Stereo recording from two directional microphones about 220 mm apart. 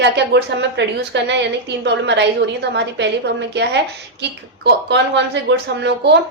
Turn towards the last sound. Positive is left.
turn(degrees=-50)  # may be behind; listen again after turning